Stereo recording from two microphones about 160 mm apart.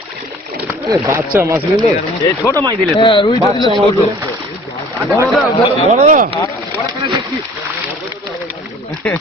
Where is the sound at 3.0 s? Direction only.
30° left (ahead or behind).